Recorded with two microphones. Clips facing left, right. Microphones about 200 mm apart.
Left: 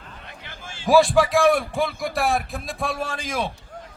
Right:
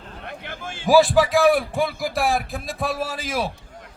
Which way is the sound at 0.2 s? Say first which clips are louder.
Right 10 dB; 55° right (ahead or behind).